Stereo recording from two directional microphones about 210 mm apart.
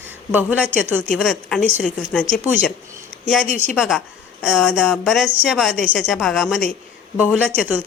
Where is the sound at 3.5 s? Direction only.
35° left (ahead or behind).